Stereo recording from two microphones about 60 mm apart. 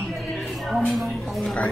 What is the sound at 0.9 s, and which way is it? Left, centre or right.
Speech, centre.